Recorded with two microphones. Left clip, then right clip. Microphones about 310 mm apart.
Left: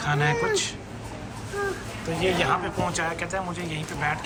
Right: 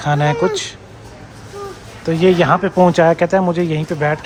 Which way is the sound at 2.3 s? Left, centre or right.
Centre.